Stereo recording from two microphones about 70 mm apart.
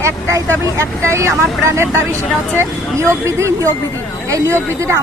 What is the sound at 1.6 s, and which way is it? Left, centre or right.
Speech, right.